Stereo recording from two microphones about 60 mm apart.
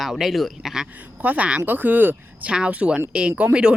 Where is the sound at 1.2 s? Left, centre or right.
Right.